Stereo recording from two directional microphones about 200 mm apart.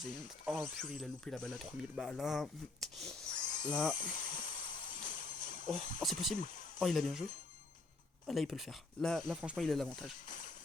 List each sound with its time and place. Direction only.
0.3 s speech: centre (ahead or behind)
3.3 s a sound: 40° left (ahead or behind)
3.7 s speech: centre (ahead or behind)
3.9 s jingle bell: 40° left (ahead or behind)
6.0 s speech: centre (ahead or behind)
6.4 s a sound: 40° left (ahead or behind)
6.7 s speech: centre (ahead or behind)
8.3 s speech: centre (ahead or behind)
10.2 s speech: 40° left (ahead or behind)